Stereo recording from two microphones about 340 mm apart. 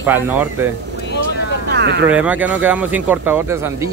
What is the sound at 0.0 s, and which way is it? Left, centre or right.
Speech, centre.